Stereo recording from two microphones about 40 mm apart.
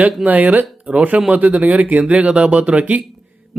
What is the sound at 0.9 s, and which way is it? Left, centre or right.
Speech, centre.